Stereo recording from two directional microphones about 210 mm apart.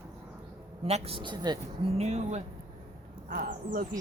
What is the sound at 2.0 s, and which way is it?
Speech, 30° right (ahead or behind).